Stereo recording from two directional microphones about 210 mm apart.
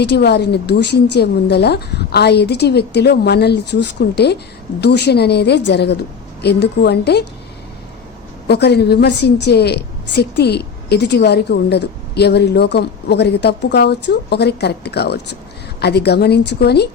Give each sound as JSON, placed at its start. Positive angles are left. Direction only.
{"t": 0.0, "sound": "a woman's voice", "side_deg": 50}
{"t": 8.4, "sound": "a woman's voice", "side_deg": 50}